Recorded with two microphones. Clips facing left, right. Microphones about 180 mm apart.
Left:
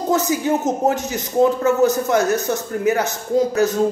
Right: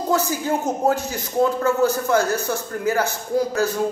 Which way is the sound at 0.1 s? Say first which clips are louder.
Left 3 dB; 20° left (ahead or behind).